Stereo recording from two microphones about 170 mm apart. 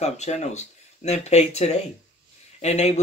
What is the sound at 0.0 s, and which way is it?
Speech, 40° left (ahead or behind).